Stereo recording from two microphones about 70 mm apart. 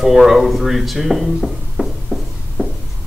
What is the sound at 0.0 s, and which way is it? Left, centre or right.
Speech, centre.